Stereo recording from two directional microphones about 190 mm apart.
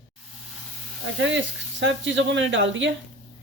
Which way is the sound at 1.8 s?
75° right (ahead or behind).